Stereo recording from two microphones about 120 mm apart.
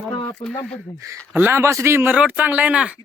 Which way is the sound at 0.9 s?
25° right (ahead or behind).